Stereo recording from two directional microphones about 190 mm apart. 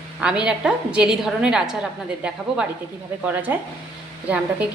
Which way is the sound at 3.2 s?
10° right (ahead or behind).